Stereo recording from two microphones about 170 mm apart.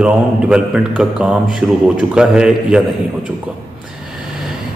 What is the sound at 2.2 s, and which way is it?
Speech, 5° right (ahead or behind).